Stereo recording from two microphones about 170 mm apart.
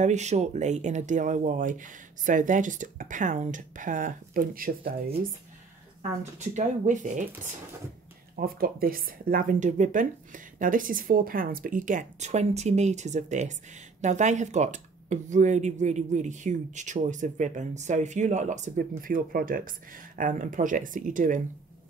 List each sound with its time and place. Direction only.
0.0 s speech: 45° right (ahead or behind); by 5.1 s 60° right (ahead or behind)
6.3 s speech: 45° right (ahead or behind)
8.4 s speech: 60° right (ahead or behind)